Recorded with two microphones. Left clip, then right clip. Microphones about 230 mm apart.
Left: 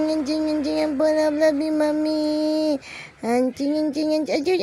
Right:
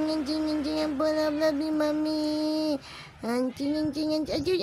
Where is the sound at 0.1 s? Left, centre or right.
Centre.